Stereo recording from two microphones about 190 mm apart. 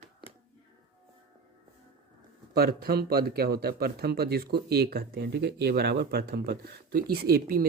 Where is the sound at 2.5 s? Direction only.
55° right (ahead or behind).